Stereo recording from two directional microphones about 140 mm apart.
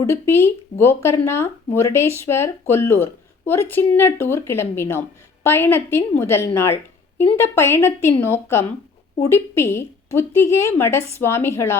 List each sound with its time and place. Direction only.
0.0 s a woman's voice: 20° left (ahead or behind)